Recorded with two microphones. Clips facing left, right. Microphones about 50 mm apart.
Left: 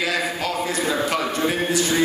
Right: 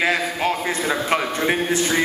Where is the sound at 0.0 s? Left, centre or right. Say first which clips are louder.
Right 3 dB; right.